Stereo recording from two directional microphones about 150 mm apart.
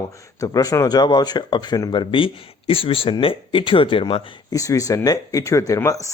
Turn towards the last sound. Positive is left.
turn(degrees=20)  # may be behind; listen again after turning